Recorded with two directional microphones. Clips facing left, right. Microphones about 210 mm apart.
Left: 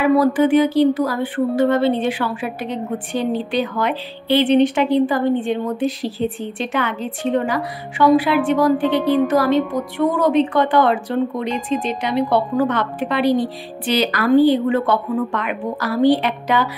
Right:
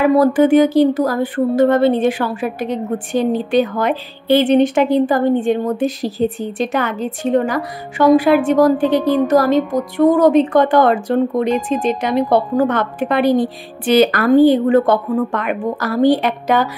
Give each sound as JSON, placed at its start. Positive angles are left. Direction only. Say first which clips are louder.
{"t": 0.0, "sound": "speech", "louder": "right 3 dB", "side_deg": -45}